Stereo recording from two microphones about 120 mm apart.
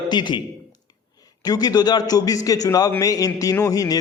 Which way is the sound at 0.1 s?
40° left (ahead or behind).